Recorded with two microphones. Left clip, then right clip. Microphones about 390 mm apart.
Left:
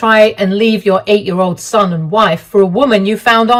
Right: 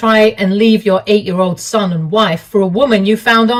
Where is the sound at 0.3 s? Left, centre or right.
Left.